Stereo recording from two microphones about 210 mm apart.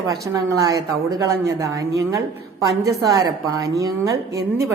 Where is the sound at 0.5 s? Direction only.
15° right (ahead or behind).